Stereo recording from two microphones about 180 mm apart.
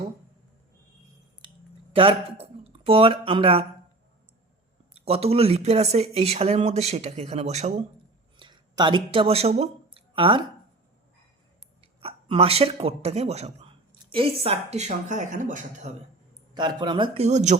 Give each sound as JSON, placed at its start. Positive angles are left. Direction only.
{"t": 2.0, "sound": "speech", "side_deg": -30}
{"t": 4.9, "sound": "speech", "side_deg": -35}
{"t": 8.4, "sound": "a sound", "side_deg": -25}
{"t": 9.1, "sound": "speech", "side_deg": -35}
{"t": 11.9, "sound": "speech", "side_deg": -30}
{"t": 16.6, "sound": "speech", "side_deg": -25}